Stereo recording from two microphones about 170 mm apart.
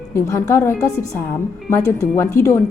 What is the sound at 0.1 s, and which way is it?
A woman's voice, 15° left (ahead or behind).